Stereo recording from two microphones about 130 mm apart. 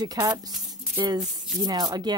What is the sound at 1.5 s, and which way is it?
Speech, 30° right (ahead or behind).